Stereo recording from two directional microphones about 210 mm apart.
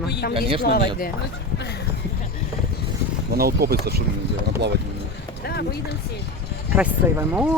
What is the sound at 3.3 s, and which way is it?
Speech, 45° right (ahead or behind).